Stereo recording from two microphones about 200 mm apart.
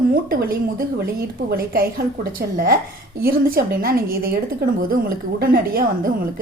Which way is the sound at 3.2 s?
50° right (ahead or behind).